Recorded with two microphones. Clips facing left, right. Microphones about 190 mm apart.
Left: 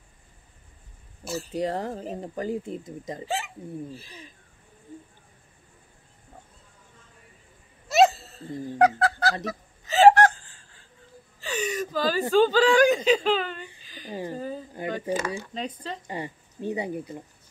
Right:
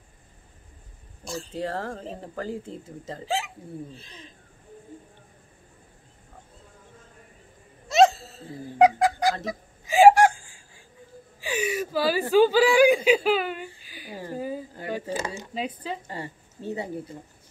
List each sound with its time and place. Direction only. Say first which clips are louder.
1.2 s speech: left 2 dB; 5° left (ahead or behind)
1.5 s speech: left 3 dB; 15° left (ahead or behind)
3.3 s speech: right 4 dB; centre (ahead or behind)
7.9 s a sound: right 1 dB; centre (ahead or behind)
8.7 s fowl: right 3 dB; 15° right (ahead or behind)
11.4 s speech: right 1 dB; 10° right (ahead or behind)
13.8 s a sound: left 2 dB; 10° right (ahead or behind)
14.3 s speech: right 2 dB; 10° right (ahead or behind)
16.1 s speech: left 2 dB; 15° left (ahead or behind)